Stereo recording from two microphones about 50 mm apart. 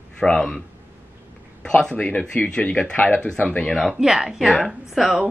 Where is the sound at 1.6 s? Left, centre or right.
Centre.